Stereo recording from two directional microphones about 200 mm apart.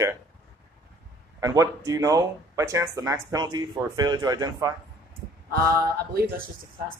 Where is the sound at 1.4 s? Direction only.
15° right (ahead or behind).